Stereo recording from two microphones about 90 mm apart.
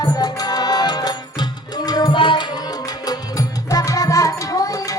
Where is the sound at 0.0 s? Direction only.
45° left (ahead or behind).